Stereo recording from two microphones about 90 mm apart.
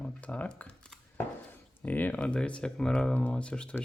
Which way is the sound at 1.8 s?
20° left (ahead or behind).